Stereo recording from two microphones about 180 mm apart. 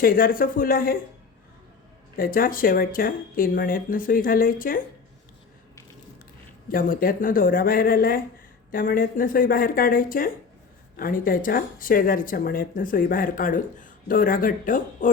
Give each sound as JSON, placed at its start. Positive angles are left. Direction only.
{"t": 0.0, "sound": "speech", "side_deg": 55}
{"t": 2.1, "sound": "speech", "side_deg": 55}
{"t": 6.7, "sound": "speech", "side_deg": 50}